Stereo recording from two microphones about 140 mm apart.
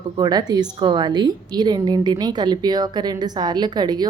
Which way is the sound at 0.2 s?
30° right (ahead or behind).